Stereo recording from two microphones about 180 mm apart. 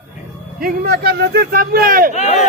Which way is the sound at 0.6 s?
60° right (ahead or behind).